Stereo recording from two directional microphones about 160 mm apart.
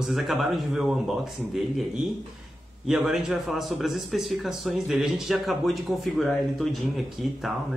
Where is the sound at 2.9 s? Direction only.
Centre (ahead or behind).